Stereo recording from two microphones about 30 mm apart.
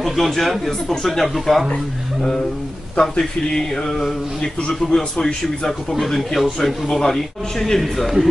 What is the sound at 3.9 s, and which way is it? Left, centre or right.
Speech, centre.